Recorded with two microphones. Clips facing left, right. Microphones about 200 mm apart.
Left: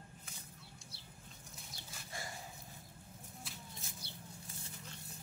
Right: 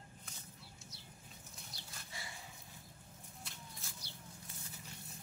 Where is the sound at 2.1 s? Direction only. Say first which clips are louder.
Left 5 dB; 50° left (ahead or behind).